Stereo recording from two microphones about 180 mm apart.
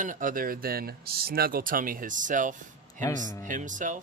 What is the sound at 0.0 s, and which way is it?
Speech, 45° right (ahead or behind).